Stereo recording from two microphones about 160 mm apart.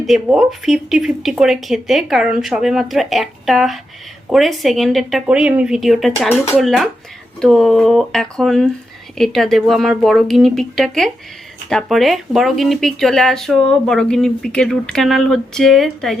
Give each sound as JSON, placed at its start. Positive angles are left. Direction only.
{"t": 0.0, "sound": "speech", "side_deg": 0}